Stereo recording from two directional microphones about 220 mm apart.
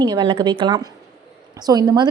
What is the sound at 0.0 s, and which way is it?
A woman's voice, 20° right (ahead or behind).